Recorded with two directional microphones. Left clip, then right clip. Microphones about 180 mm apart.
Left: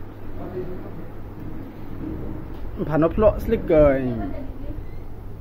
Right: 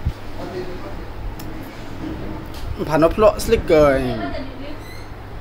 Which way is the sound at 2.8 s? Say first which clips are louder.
Right 4 dB; 10° right (ahead or behind).